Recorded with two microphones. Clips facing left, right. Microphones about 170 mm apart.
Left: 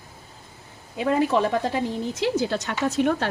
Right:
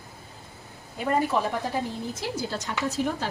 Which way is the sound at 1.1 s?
90° left.